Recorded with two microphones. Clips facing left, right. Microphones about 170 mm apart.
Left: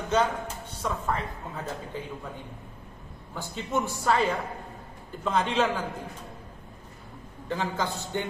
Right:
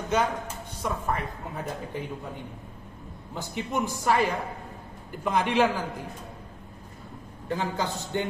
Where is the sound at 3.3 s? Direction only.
15° right (ahead or behind).